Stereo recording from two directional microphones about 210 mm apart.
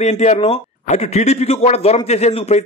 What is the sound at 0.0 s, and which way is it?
A man's voice, 30° left (ahead or behind).